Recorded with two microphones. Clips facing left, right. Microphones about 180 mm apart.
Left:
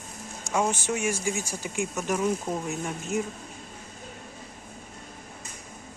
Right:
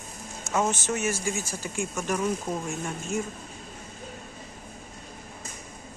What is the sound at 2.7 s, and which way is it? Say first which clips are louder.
Speech: left 1 dB; 15° left (ahead or behind).